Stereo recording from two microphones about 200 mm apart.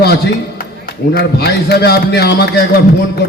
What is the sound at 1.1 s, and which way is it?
A man's voice, 50° left (ahead or behind).